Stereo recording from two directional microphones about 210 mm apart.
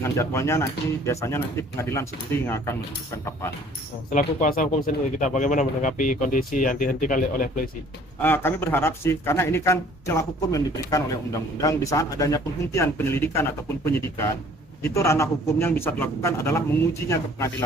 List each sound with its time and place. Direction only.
0.0 s speech: 15° left (ahead or behind)
4.1 s speech: 40° left (ahead or behind)
8.2 s speech: 10° left (ahead or behind)